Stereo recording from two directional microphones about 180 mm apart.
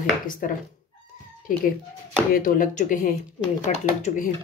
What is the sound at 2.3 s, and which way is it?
Chopping, 50° left (ahead or behind).